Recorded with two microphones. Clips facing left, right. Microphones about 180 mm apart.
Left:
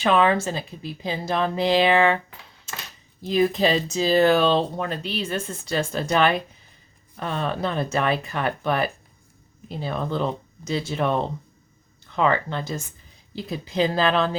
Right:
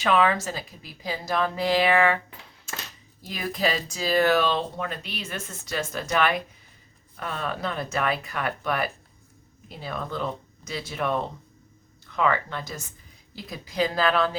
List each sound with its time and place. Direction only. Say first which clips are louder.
0.0 s speech: left 3 dB; 30° left (ahead or behind)
3.2 s speech: left 8 dB; 25° left (ahead or behind)